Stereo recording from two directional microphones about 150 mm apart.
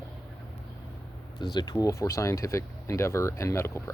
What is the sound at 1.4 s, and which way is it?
Speech, 30° left (ahead or behind).